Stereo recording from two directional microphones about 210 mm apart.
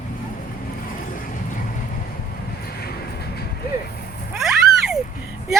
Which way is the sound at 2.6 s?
50° left (ahead or behind).